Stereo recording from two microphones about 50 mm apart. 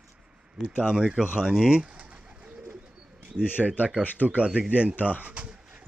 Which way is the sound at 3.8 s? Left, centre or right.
Centre.